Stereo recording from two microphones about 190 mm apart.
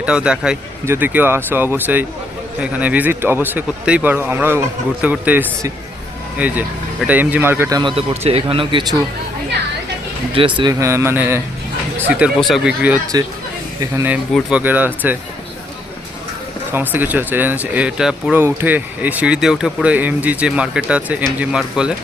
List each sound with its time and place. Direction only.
0.0 s speech: 5° right (ahead or behind)
7.8 s speech: 30° right (ahead or behind)
10.3 s speech: 25° right (ahead or behind); by 15.2 s 10° right (ahead or behind)
16.7 s speech: 10° right (ahead or behind)